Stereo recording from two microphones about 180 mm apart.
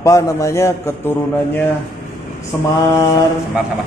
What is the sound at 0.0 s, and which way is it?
A man's voice, 15° left (ahead or behind).